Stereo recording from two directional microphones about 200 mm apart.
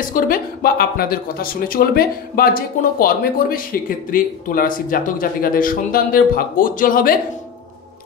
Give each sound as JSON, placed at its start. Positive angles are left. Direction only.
{"t": 0.0, "sound": "speech", "side_deg": 45}